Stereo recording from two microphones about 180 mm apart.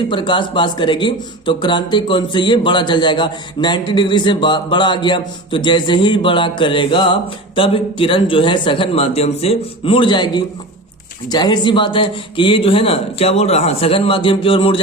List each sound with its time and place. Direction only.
0.1 s speech: 25° left (ahead or behind)